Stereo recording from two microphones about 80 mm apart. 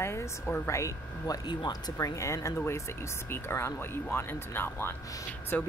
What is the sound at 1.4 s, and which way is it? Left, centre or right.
Speech, left.